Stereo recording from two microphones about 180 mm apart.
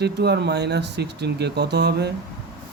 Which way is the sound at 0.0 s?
70° right (ahead or behind).